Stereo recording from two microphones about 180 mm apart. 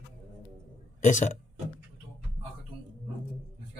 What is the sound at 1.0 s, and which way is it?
Speech, 45° left (ahead or behind).